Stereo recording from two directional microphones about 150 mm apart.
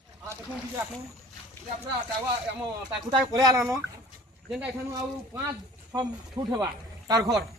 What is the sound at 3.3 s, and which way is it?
Speech, 25° right (ahead or behind).